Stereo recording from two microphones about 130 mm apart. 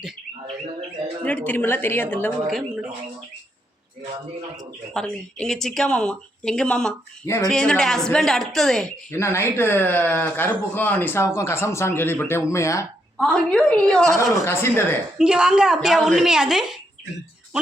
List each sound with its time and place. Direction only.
1.2 s speech: 10° left (ahead or behind)
2.5 s speech: centre (ahead or behind)
4.9 s speech: 5° left (ahead or behind)
9.1 s a man's voice: 20° left (ahead or behind)
13.1 s speech: 5° left (ahead or behind)
14.4 s a man's voice: 20° left (ahead or behind)
15.2 s speech: 5° right (ahead or behind)